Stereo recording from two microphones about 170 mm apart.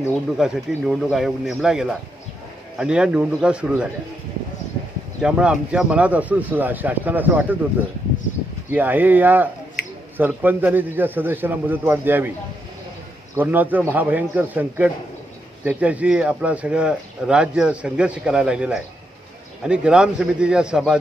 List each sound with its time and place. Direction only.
0.4 s speech: 5° right (ahead or behind)
5.2 s speech: 5° right (ahead or behind)
8.6 s speech: 10° right (ahead or behind)
9.8 s a sound: 60° left (ahead or behind)
10.1 s speech: 10° right (ahead or behind)
13.3 s speech: 10° right (ahead or behind)